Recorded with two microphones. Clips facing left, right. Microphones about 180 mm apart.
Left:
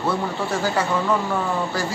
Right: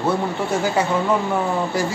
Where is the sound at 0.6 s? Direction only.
20° right (ahead or behind).